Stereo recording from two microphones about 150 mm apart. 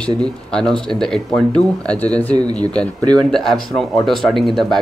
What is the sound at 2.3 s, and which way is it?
Speech, 25° right (ahead or behind).